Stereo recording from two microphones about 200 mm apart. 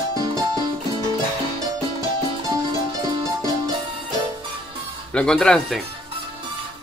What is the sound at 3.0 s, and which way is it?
Music, 20° right (ahead or behind).